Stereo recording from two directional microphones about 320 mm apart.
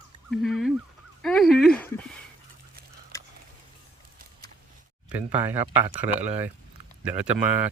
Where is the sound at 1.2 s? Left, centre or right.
Centre.